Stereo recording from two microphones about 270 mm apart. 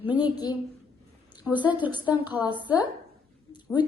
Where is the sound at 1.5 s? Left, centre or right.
Centre.